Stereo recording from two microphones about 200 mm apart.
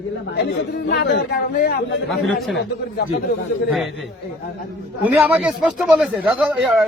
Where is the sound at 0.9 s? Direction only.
60° left (ahead or behind).